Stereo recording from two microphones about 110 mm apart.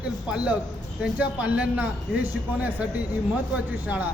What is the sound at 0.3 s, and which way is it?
A man's voice, 10° right (ahead or behind).